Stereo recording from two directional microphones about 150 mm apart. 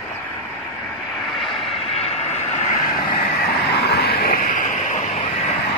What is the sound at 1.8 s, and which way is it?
Vehicle, 45° left (ahead or behind).